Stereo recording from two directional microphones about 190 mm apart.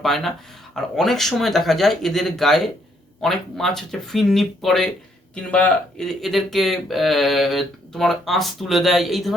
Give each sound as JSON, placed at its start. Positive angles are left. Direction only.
{"t": 0.0, "sound": "speech", "side_deg": 0}